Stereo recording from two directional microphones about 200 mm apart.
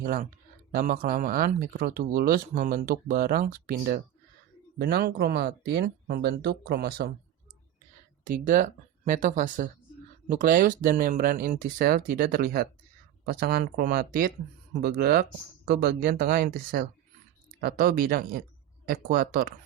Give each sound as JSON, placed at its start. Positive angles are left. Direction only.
{"t": 0.0, "sound": "speech", "side_deg": -45}
{"t": 8.2, "sound": "speech", "side_deg": -40}